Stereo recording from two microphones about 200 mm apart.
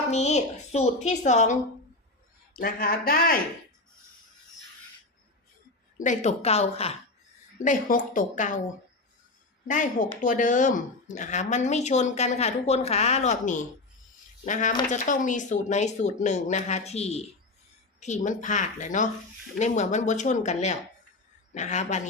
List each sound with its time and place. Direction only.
0.1 s speech: 35° left (ahead or behind)
2.6 s speech: 45° left (ahead or behind)
6.0 s speech: 35° left (ahead or behind)
7.6 s speech: 40° left (ahead or behind)
9.6 s speech: 40° left (ahead or behind)